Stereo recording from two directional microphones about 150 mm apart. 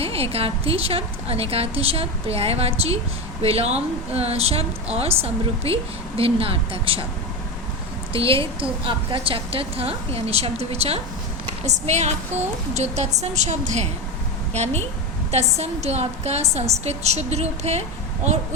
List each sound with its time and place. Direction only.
0.0 s a woman's voice: 40° right (ahead or behind)
8.1 s a woman's voice: 35° right (ahead or behind)